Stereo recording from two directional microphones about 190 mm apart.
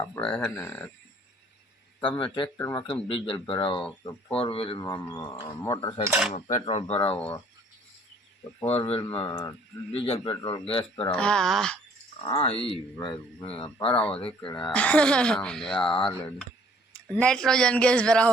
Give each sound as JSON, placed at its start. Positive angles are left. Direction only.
{"t": 0.3, "sound": "speech", "side_deg": 5}
{"t": 2.0, "sound": "speech", "side_deg": 25}
{"t": 2.6, "sound": "speech", "side_deg": 15}
{"t": 2.8, "sound": "speech", "side_deg": 30}
{"t": 6.1, "sound": "cutlery", "side_deg": -5}
{"t": 6.3, "sound": "speech", "side_deg": 35}
{"t": 8.6, "sound": "speech", "side_deg": 30}
{"t": 11.1, "sound": "speech", "side_deg": 5}
{"t": 12.2, "sound": "speech", "side_deg": 30}
{"t": 14.7, "sound": "speech", "side_deg": 5}